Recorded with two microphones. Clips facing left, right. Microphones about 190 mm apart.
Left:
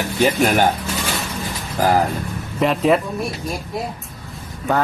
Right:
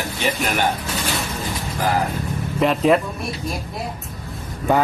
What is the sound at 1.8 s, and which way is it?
Speech, 40° left (ahead or behind).